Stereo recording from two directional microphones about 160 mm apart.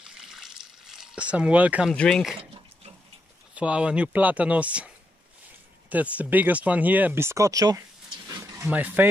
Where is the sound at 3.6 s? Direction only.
5° right (ahead or behind).